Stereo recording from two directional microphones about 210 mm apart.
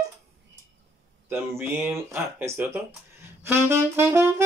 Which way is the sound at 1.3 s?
10° right (ahead or behind).